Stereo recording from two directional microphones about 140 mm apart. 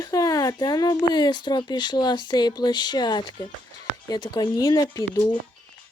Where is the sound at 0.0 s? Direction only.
25° left (ahead or behind).